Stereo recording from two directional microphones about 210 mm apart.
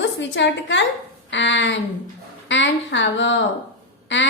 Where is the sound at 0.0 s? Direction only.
60° left (ahead or behind).